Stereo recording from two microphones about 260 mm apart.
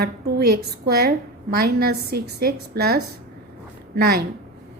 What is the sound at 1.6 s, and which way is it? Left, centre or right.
A woman's voice, right.